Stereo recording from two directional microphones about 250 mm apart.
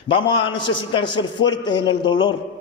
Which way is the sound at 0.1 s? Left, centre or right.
Centre.